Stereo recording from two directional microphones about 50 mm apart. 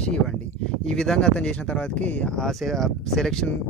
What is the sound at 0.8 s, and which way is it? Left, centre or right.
Speech, centre.